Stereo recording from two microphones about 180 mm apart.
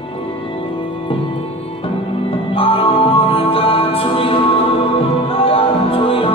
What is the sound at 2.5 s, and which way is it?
Music, 30° left (ahead or behind).